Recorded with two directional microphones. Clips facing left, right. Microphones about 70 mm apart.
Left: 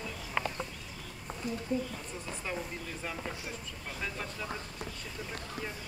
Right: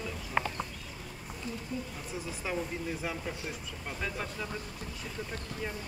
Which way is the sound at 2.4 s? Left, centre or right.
Centre.